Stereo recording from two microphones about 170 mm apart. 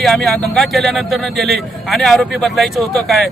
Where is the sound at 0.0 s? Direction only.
Centre (ahead or behind).